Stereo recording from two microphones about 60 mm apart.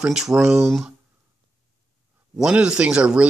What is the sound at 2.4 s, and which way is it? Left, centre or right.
Speech, centre.